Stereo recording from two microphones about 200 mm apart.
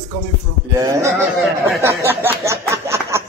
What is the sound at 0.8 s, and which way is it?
Speech, 20° right (ahead or behind).